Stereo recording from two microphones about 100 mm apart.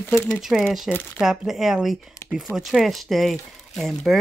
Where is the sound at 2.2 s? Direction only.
35° left (ahead or behind).